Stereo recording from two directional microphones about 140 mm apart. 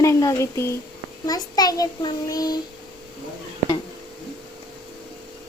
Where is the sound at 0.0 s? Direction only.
20° left (ahead or behind).